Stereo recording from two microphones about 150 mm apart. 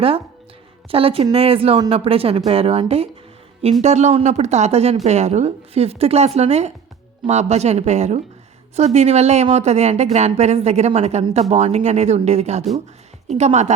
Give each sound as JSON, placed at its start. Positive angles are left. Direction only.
{"t": 0.9, "sound": "a woman's voice", "side_deg": -40}